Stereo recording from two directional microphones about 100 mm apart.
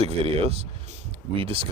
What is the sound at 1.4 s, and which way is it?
Speech, 65° right (ahead or behind).